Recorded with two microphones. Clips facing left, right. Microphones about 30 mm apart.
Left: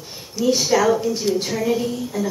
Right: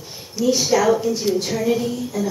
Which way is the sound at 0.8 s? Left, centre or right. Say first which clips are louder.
Right 1 dB; centre.